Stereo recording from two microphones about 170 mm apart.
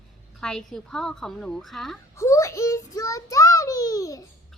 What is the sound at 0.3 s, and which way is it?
A woman's voice, 5° left (ahead or behind).